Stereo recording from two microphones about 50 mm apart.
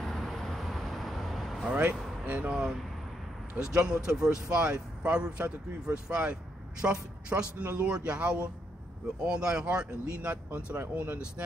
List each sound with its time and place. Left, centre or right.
0.0 s vehicle: centre
1.6 s speech: right
1.9 s speech: right
2.5 s speech: centre; by 10.8 s right